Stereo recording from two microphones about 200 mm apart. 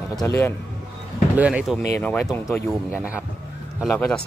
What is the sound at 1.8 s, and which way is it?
Speech, 15° left (ahead or behind).